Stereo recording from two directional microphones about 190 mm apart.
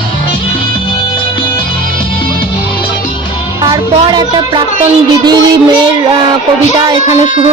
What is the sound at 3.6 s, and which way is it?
Music, 20° right (ahead or behind).